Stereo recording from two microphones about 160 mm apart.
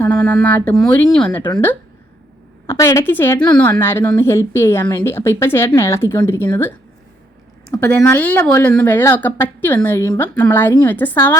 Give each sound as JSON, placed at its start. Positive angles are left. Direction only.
{"t": 0.0, "sound": "a sound", "side_deg": 10}
{"t": 0.3, "sound": "a woman's voice", "side_deg": 10}
{"t": 2.6, "sound": "a woman's voice", "side_deg": 20}
{"t": 8.0, "sound": "a woman's voice", "side_deg": 10}